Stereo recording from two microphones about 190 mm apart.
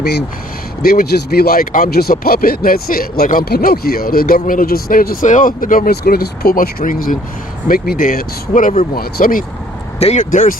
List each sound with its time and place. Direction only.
0.0 s speech: 60° left (ahead or behind)
10.0 s speech: 40° left (ahead or behind)